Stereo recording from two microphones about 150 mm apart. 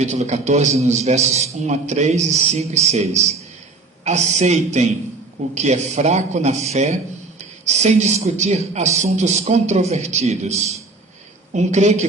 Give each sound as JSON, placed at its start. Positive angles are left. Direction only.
{"t": 0.0, "sound": "speech", "side_deg": -50}